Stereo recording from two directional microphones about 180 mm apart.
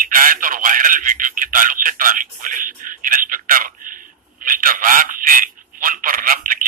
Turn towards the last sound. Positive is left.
turn(degrees=-50)  # may be behind; listen again after turning